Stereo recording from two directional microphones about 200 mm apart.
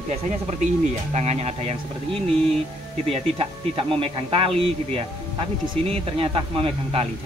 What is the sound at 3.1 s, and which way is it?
Speech, 30° right (ahead or behind).